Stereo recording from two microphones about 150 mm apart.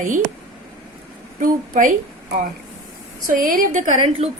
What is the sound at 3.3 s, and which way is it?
Speech, 70° right (ahead or behind).